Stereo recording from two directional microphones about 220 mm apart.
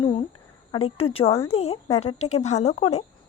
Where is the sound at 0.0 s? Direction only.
25° left (ahead or behind).